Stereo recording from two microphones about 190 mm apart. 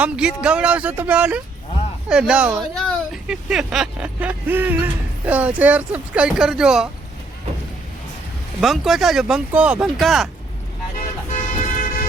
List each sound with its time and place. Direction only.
0.0 s speech: 5° right (ahead or behind)
8.6 s speech: centre (ahead or behind)
11.3 s vehicle: 45° left (ahead or behind)